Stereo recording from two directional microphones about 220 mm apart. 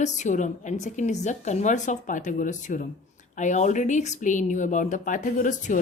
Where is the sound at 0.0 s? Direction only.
30° left (ahead or behind).